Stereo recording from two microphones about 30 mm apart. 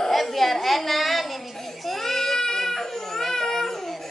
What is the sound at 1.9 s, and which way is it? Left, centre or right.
Baby cry, centre.